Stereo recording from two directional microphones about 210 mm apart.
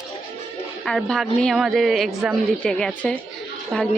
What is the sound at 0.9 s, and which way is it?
A woman's voice, 5° left (ahead or behind).